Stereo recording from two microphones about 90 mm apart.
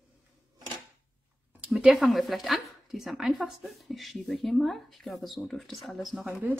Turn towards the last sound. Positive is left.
turn(degrees=-10)  # may be behind; listen again after turning